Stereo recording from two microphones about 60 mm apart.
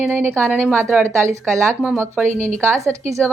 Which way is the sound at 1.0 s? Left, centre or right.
Right.